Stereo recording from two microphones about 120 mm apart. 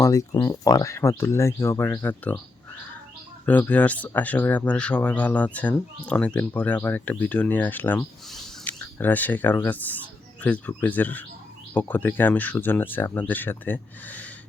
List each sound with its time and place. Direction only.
0.0 s speech: 25° left (ahead or behind)
3.4 s speech: 15° left (ahead or behind)